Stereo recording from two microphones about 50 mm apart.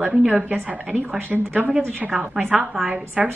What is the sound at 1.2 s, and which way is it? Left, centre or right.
Speech, right.